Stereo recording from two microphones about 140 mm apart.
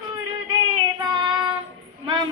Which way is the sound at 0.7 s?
30° right (ahead or behind).